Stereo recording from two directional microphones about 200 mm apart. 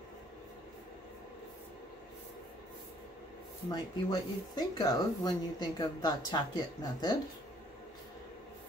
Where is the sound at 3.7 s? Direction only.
20° left (ahead or behind).